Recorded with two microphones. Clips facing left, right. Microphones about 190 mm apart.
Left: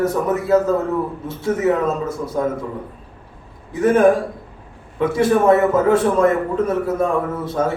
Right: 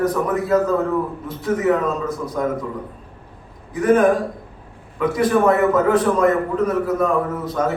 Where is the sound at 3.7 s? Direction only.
25° left (ahead or behind).